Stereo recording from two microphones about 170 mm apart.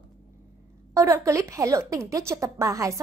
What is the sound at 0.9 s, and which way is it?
A woman's voice, 15° right (ahead or behind).